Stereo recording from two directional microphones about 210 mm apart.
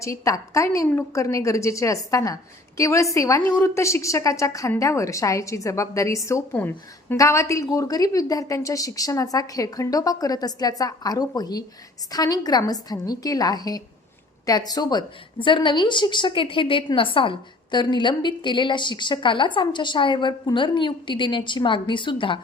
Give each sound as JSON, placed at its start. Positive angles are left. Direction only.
{"t": 0.0, "sound": "a woman's voice", "side_deg": 15}